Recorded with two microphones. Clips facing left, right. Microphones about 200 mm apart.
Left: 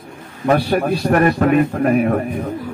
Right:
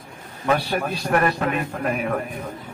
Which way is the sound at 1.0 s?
45° left (ahead or behind).